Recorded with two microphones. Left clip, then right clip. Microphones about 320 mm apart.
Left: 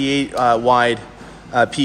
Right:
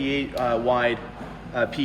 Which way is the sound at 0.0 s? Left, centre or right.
Centre.